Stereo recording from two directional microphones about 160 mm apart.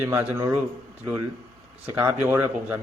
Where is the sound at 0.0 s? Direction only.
20° right (ahead or behind).